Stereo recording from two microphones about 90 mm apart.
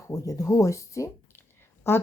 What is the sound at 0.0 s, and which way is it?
A woman's voice, 35° left (ahead or behind).